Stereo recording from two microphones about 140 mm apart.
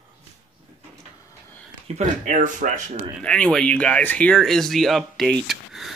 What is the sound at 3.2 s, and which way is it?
Speech, 5° left (ahead or behind).